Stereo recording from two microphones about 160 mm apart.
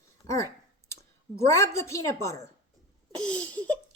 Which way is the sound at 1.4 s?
20° left (ahead or behind).